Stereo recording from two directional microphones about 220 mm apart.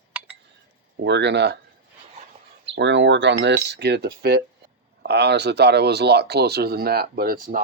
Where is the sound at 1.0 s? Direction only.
50° right (ahead or behind).